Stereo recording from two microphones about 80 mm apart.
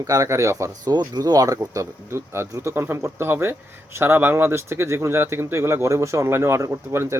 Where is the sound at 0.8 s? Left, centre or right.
Right.